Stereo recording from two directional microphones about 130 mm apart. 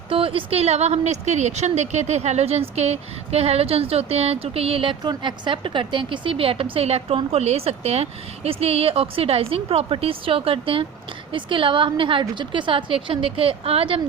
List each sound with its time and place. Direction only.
0.1 s a woman's voice: 45° right (ahead or behind)